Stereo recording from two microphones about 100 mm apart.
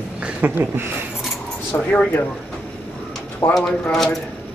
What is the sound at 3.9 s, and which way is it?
Speech, 5° left (ahead or behind).